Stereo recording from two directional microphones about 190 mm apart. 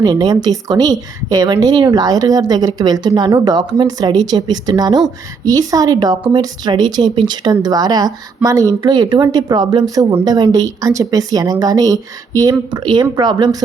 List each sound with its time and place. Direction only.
0.0 s speech: 20° right (ahead or behind)